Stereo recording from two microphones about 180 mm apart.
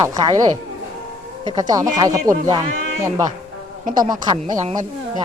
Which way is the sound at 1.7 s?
20° right (ahead or behind).